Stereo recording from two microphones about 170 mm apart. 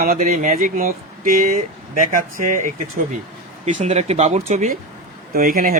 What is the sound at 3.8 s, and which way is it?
Speech, 40° right (ahead or behind).